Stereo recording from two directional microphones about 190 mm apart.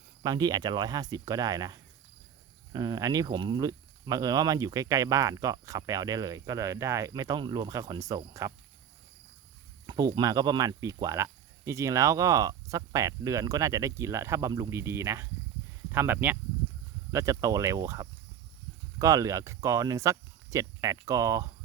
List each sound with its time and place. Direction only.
0.2 s speech: 20° right (ahead or behind)
9.8 s speech: 20° right (ahead or behind)